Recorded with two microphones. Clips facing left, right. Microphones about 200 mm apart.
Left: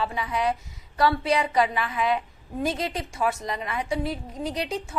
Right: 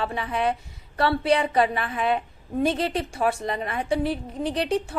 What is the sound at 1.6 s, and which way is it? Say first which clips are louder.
Speech: right 1 dB; 50° right (ahead or behind).